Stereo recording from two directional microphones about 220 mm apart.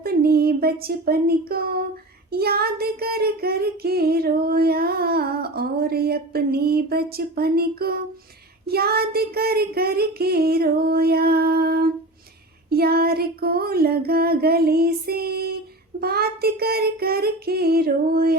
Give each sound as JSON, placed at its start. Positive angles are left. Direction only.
{"t": 0.0, "sound": "singing", "side_deg": -45}